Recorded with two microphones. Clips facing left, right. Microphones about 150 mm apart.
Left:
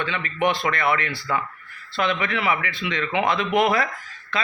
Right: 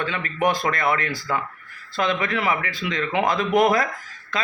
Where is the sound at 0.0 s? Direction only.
40° right (ahead or behind).